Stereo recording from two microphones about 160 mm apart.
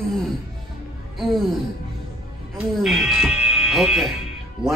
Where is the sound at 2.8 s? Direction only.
Centre (ahead or behind).